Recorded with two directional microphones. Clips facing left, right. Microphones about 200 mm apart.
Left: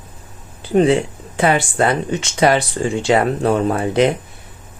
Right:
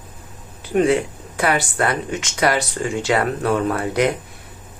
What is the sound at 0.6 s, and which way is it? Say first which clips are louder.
Speech: left 3 dB; 30° left (ahead or behind).